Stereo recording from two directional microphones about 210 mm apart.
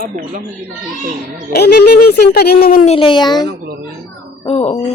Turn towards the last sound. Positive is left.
turn(degrees=20)  # may be behind; listen again after turning